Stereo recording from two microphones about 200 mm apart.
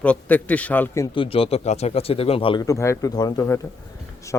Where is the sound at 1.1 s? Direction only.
30° left (ahead or behind).